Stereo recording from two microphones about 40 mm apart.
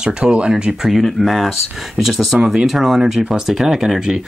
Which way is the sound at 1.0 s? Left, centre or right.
Centre.